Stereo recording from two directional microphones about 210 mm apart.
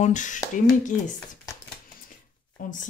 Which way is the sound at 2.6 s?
40° left (ahead or behind).